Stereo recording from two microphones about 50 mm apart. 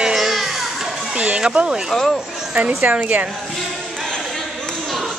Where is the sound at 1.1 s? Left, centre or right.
Right.